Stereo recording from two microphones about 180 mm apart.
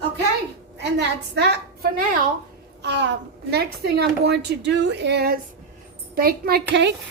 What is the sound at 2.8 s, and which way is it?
A child's voice, 75° right (ahead or behind).